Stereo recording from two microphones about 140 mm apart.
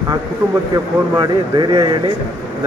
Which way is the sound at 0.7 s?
30° right (ahead or behind).